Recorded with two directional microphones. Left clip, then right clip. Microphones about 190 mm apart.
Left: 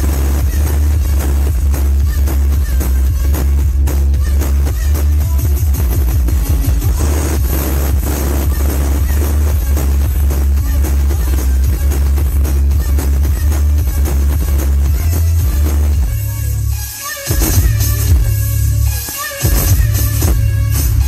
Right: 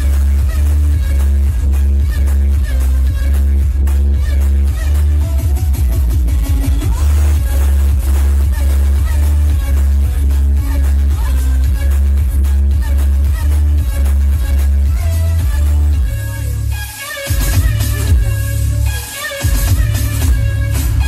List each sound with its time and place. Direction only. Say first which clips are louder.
17.2 s music: left 5 dB; 20° right (ahead or behind)